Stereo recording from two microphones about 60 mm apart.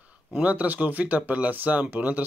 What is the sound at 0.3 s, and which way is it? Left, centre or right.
Speech, right.